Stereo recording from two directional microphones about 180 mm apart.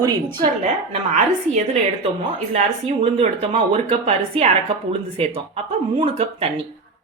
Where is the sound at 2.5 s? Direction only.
35° right (ahead or behind).